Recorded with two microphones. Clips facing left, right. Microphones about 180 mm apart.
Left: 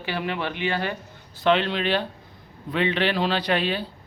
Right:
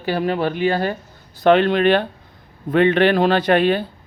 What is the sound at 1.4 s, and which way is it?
Speech, 50° right (ahead or behind).